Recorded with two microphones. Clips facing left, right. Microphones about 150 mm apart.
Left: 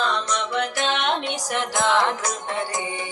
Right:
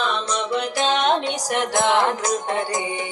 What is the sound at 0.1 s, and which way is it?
Music, 30° right (ahead or behind).